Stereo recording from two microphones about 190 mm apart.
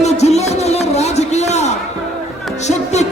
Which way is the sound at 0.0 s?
35° left (ahead or behind).